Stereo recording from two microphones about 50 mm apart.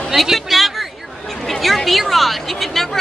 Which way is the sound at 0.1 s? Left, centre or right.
Centre.